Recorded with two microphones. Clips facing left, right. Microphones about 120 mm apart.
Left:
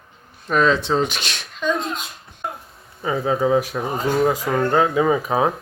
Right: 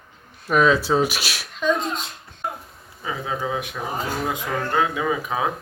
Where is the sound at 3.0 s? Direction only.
35° left (ahead or behind).